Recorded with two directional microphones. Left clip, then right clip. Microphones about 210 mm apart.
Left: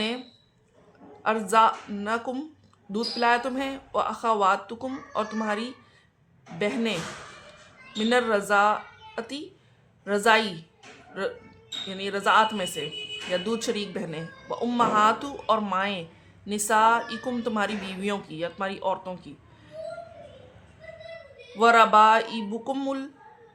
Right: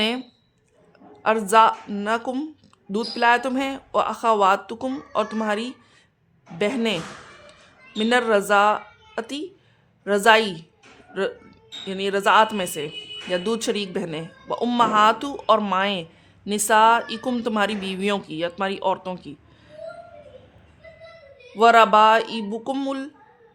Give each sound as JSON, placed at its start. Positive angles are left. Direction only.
{"t": 1.2, "sound": "speech", "side_deg": -45}
{"t": 21.6, "sound": "speech", "side_deg": -40}